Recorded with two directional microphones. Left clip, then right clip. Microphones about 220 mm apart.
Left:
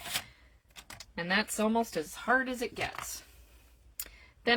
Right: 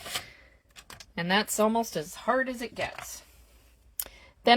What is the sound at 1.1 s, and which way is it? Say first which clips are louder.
Speech: right 4 dB; 45° right (ahead or behind).